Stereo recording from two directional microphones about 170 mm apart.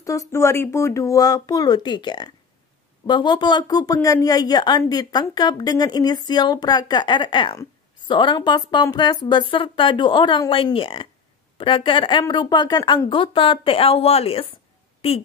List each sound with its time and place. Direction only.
0.0 s a woman's voice: 20° left (ahead or behind); by 15.2 s 35° left (ahead or behind)